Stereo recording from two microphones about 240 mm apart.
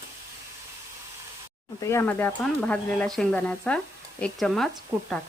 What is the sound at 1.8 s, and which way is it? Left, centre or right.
Speech, centre.